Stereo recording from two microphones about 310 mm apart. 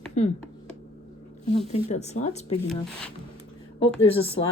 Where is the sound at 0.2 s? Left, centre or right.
Left.